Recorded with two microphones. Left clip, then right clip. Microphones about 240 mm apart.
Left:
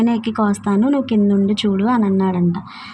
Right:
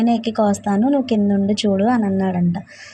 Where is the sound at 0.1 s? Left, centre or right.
Centre.